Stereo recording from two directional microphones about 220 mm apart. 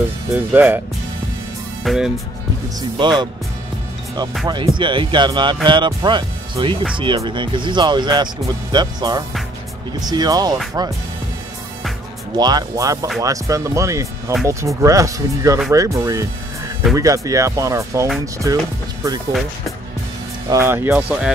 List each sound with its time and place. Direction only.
0.5 s speech: 5° right (ahead or behind)
1.9 s speech: 5° right (ahead or behind)
3.0 s speech: 20° right (ahead or behind)
4.5 s speech: 20° right (ahead or behind)
12.4 s speech: 20° right (ahead or behind)
20.4 s speech: 10° right (ahead or behind)